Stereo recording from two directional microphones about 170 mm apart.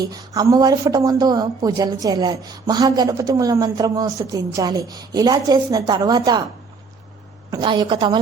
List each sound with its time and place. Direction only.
0.0 s a woman's voice: 20° right (ahead or behind)
7.5 s a woman's voice: 25° right (ahead or behind)